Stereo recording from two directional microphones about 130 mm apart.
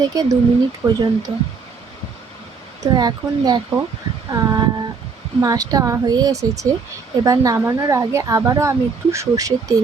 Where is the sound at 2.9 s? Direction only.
35° right (ahead or behind).